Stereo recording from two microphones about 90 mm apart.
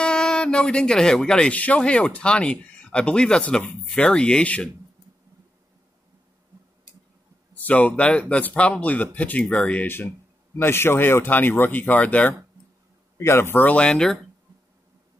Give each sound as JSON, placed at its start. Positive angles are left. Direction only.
{"t": 0.0, "sound": "speech", "side_deg": 10}
{"t": 7.5, "sound": "speech", "side_deg": 15}
{"t": 10.6, "sound": "speech", "side_deg": 25}